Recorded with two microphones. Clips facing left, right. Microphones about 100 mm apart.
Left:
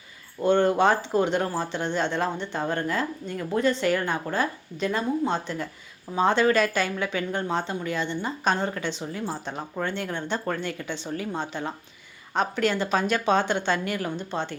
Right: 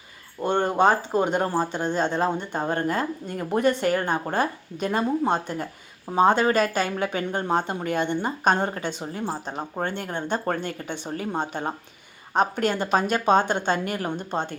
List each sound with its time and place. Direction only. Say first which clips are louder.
0.6 s speech: right 1 dB; 40° right (ahead or behind)
6.1 s speech: right 2 dB; 35° right (ahead or behind)
9.2 s speech: right 4 dB; 35° right (ahead or behind)
9.8 s speech: even; 50° right (ahead or behind)